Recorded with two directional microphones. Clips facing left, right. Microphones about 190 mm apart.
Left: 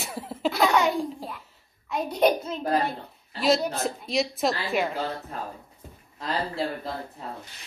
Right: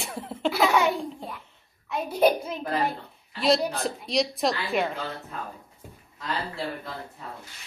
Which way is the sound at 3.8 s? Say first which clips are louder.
Even; centre (ahead or behind).